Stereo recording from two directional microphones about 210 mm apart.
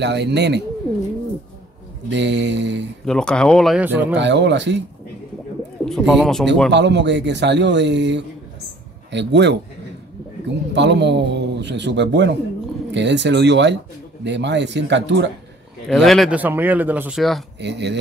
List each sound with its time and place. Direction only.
0.0 s speech: 55° right (ahead or behind)
2.0 s a man's voice: 55° right (ahead or behind)
3.1 s speech: 5° left (ahead or behind)
4.1 s a man's voice: 55° right (ahead or behind)
5.9 s speech: centre (ahead or behind)
6.7 s a man's voice: 55° right (ahead or behind)
10.7 s a man's voice: 55° right (ahead or behind)
15.9 s speech: centre (ahead or behind)
17.6 s a man's voice: 55° right (ahead or behind)